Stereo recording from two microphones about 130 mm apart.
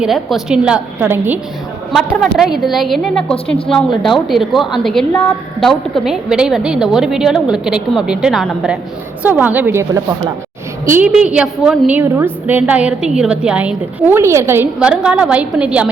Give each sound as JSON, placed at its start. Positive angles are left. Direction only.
{"t": 0.0, "sound": "a woman's voice", "side_deg": 0}
{"t": 1.9, "sound": "a woman's voice", "side_deg": 0}
{"t": 14.8, "sound": "a woman's voice", "side_deg": -5}